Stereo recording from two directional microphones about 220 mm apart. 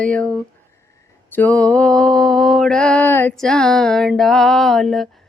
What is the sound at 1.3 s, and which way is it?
Mantra, 5° left (ahead or behind).